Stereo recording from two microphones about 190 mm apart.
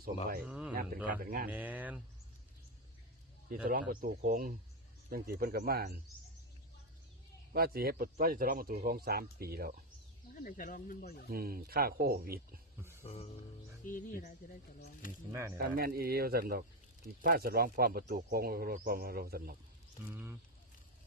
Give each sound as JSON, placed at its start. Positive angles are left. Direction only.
{"t": 0.4, "sound": "a man's voice", "side_deg": -5}
{"t": 0.7, "sound": "speech", "side_deg": -45}
{"t": 1.5, "sound": "speech", "side_deg": -10}
{"t": 3.5, "sound": "speech", "side_deg": -45}
{"t": 7.5, "sound": "speech", "side_deg": -55}
{"t": 10.3, "sound": "speech", "side_deg": 45}
{"t": 11.3, "sound": "speech", "side_deg": -50}
{"t": 13.1, "sound": "music", "side_deg": 35}
{"t": 13.8, "sound": "speech", "side_deg": 45}
{"t": 15.3, "sound": "speech", "side_deg": -15}
{"t": 15.5, "sound": "speech", "side_deg": -50}
{"t": 20.1, "sound": "speech", "side_deg": -10}